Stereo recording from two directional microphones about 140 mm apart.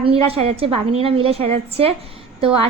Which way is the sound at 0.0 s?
45° right (ahead or behind).